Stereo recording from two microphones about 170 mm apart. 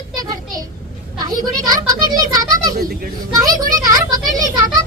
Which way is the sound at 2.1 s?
20° right (ahead or behind).